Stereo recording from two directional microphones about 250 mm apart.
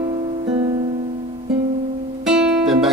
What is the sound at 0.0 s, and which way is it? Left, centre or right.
Music, right.